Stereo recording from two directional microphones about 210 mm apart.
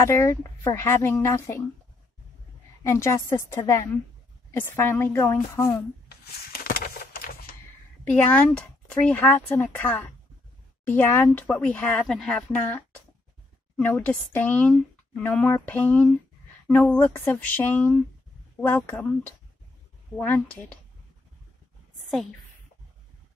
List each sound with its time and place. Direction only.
0.0 s speech: 15° left (ahead or behind)
2.8 s speech: 15° left (ahead or behind)
6.6 s a sound: 45° left (ahead or behind)
8.0 s speech: 5° left (ahead or behind)